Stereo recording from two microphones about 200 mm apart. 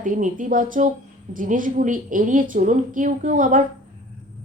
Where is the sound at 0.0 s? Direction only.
40° right (ahead or behind).